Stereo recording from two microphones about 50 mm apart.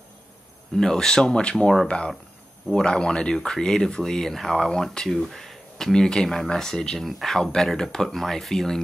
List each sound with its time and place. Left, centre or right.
0.7 s speech: centre